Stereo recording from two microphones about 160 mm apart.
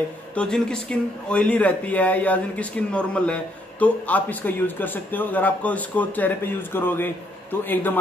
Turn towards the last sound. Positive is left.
turn(degrees=10)  # may be behind; listen again after turning